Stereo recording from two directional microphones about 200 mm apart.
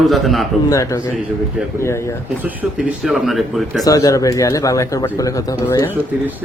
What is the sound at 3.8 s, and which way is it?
Speech, 15° left (ahead or behind).